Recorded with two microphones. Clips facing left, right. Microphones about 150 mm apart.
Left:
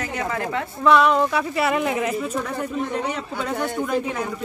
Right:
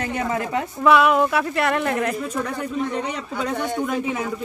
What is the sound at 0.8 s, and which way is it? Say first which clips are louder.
Speech: even; 5° right (ahead or behind).